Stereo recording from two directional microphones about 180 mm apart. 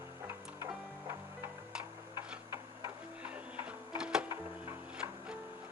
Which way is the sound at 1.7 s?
5° right (ahead or behind).